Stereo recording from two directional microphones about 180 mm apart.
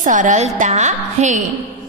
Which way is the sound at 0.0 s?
45° right (ahead or behind).